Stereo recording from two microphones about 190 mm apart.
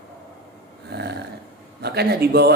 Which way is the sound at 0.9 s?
60° right (ahead or behind).